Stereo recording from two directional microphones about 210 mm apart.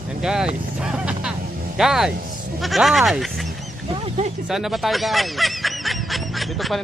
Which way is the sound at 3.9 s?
25° right (ahead or behind).